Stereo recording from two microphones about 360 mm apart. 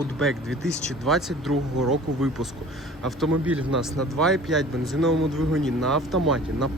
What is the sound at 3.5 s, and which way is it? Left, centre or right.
Speech, centre.